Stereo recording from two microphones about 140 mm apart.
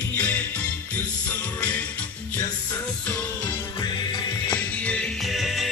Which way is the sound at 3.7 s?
30° left (ahead or behind).